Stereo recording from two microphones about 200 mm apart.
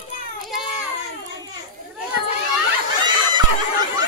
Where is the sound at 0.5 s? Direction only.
Centre (ahead or behind).